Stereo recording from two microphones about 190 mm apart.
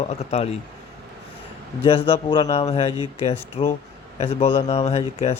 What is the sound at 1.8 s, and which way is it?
A man's voice, 30° left (ahead or behind).